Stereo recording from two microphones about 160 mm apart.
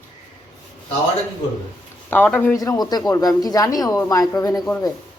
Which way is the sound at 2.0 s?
10° left (ahead or behind).